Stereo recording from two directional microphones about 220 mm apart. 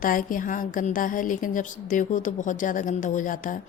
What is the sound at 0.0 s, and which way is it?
A woman's voice, 40° left (ahead or behind).